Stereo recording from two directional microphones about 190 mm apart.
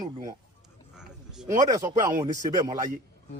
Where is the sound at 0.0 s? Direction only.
20° right (ahead or behind).